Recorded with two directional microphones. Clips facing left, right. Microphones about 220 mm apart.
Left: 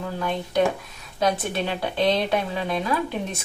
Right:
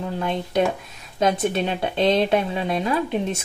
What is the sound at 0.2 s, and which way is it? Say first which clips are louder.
Speech: even; 25° right (ahead or behind).